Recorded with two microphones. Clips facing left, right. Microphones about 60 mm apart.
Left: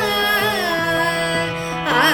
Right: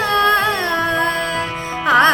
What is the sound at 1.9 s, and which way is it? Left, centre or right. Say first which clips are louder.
Music: right 4 dB; right.